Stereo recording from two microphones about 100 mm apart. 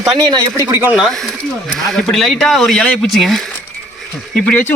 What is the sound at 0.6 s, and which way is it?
Speech, 25° right (ahead or behind).